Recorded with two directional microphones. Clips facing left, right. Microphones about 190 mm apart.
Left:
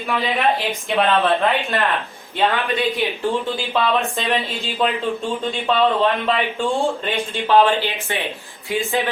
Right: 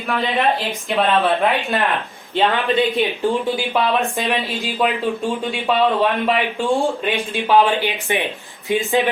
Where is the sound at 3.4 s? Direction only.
15° right (ahead or behind).